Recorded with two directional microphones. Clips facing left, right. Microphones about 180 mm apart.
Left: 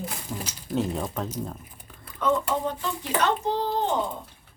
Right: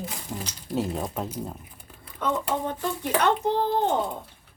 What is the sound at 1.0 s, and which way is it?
Speech, 10° right (ahead or behind).